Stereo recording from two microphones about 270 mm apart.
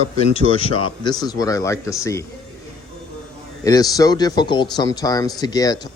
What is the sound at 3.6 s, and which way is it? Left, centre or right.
Speech, centre.